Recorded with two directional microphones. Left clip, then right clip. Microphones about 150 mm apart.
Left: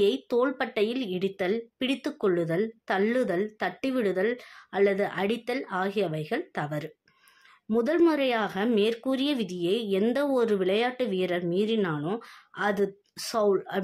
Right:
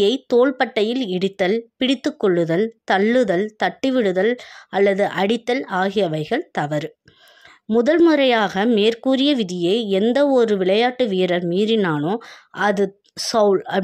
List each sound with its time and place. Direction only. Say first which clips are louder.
0.0 s speech: right 8 dB; 45° right (ahead or behind)